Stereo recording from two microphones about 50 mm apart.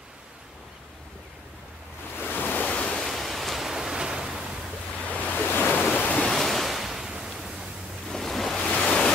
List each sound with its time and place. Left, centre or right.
2.2 s waves: left
2.7 s waves: left
3.1 s pink noise: centre
5.1 s waves: left
6.3 s ocean: centre
8.1 s waves: centre
8.7 s waves: centre